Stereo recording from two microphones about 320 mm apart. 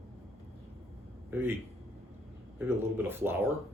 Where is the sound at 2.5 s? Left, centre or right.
Centre.